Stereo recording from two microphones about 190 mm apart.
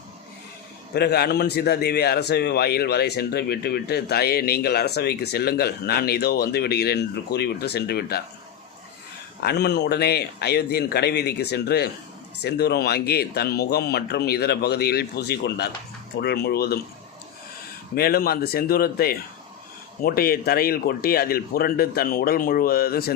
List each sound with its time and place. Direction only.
0.9 s a man's voice: 60° left (ahead or behind)
9.4 s a man's voice: 60° left (ahead or behind)
17.9 s speech: 55° left (ahead or behind)